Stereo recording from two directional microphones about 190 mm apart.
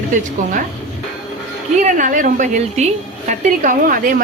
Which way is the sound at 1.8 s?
40° right (ahead or behind).